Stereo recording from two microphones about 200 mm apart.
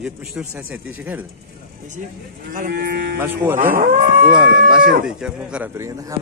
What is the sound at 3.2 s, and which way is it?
Speech, 10° right (ahead or behind).